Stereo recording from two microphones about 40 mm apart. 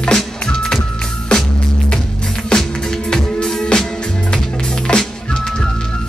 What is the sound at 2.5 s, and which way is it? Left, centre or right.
Music, left.